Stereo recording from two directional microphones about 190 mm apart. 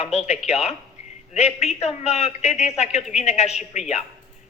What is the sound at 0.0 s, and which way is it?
A man's voice, 35° left (ahead or behind).